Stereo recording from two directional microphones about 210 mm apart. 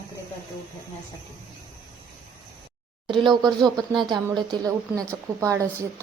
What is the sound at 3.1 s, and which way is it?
Speech, 20° right (ahead or behind).